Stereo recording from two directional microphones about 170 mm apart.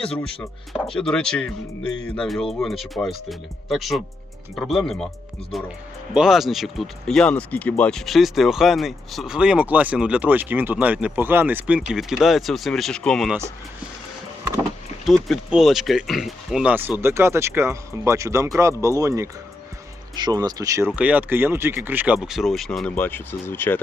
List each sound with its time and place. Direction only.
0.7 s speech: 5° left (ahead or behind)
15.0 s speech: centre (ahead or behind)